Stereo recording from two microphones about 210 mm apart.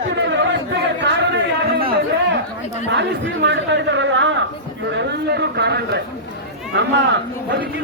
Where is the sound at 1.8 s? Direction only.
45° right (ahead or behind).